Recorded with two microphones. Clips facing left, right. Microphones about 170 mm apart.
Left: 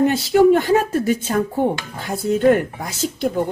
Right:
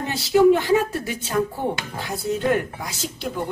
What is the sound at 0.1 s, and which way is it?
Speech, 50° left (ahead or behind).